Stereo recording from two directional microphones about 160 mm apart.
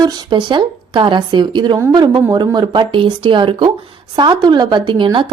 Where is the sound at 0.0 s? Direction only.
30° right (ahead or behind).